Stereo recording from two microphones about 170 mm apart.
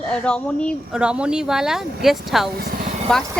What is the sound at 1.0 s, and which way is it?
Speech, 5° right (ahead or behind).